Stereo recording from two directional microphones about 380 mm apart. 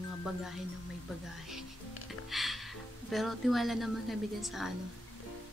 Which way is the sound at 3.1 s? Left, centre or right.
Centre.